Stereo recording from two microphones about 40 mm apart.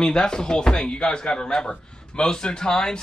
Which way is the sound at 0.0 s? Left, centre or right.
Centre.